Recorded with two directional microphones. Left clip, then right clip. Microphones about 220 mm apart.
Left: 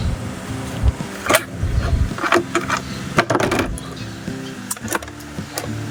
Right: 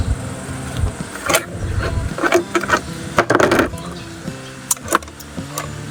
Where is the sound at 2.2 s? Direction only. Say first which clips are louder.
Right 2 dB; 20° right (ahead or behind).